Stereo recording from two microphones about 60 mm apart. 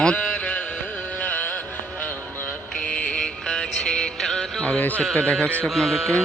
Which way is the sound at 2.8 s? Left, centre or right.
Centre.